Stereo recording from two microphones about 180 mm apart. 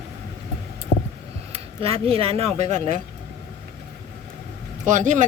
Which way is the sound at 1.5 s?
30° right (ahead or behind).